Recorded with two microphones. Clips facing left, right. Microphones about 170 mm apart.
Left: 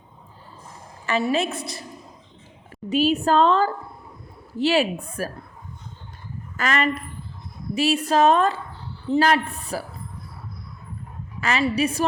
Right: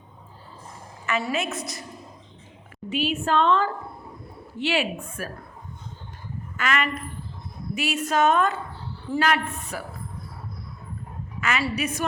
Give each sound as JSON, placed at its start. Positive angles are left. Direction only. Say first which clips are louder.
{"t": 1.2, "sound": "a woman's voice", "louder": "left 5 dB", "side_deg": 30}
{"t": 2.9, "sound": "a woman's voice", "louder": "left 5 dB", "side_deg": 40}
{"t": 6.6, "sound": "a woman's voice", "louder": "left 3 dB", "side_deg": 35}
{"t": 11.3, "sound": "a sound", "louder": "left 2 dB", "side_deg": 35}
{"t": 11.6, "sound": "a woman's voice", "louder": "left 5 dB", "side_deg": 30}